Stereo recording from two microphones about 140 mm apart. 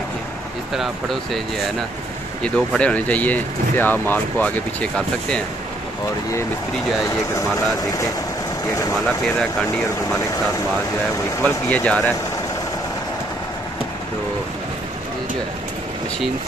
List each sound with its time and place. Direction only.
0.7 s speech: centre (ahead or behind)
2.4 s speech: 5° left (ahead or behind)
7.3 s speech: 25° left (ahead or behind)
11.4 s speech: 10° left (ahead or behind)